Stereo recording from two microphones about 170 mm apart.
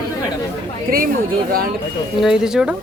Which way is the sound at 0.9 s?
60° right (ahead or behind).